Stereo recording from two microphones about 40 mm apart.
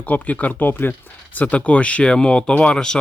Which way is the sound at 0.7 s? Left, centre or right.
Left.